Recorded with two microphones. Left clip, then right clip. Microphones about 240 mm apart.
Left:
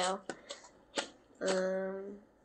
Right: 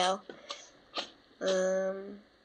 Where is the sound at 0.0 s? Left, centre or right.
Centre.